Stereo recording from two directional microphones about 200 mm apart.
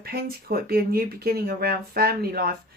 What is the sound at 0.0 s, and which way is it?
Speech, 50° right (ahead or behind).